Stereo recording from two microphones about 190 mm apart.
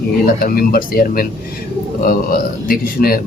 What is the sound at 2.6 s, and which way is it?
Speech, 50° left (ahead or behind).